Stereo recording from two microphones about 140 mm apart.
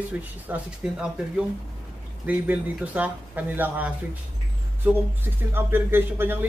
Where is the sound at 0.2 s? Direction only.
10° right (ahead or behind).